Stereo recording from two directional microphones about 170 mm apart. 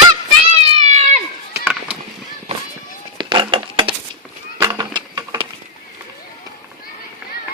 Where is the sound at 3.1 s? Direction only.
30° right (ahead or behind).